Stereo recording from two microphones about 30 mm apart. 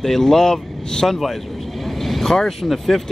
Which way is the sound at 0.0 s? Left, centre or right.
Centre.